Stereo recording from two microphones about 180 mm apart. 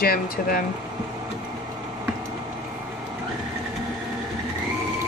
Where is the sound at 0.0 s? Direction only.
55° left (ahead or behind).